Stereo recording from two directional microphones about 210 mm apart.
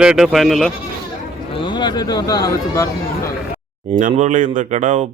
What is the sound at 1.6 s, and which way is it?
Speech, 20° left (ahead or behind).